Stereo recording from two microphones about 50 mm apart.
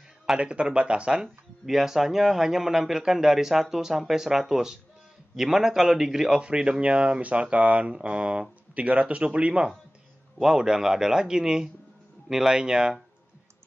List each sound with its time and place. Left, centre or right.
0.4 s speech: right
1.7 s a man's voice: centre
6.4 s speech: right
10.4 s a man's voice: centre